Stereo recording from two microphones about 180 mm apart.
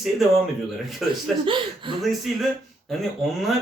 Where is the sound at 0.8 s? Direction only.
Centre (ahead or behind).